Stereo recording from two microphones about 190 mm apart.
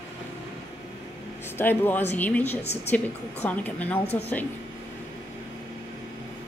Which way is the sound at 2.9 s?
10° left (ahead or behind).